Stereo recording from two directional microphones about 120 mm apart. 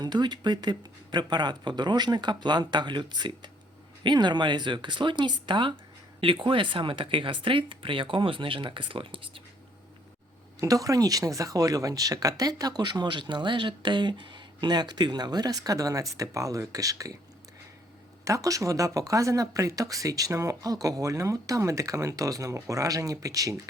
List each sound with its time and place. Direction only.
0.0 s speech: 35° right (ahead or behind)
10.6 s speech: 30° right (ahead or behind)
18.3 s speech: 30° right (ahead or behind)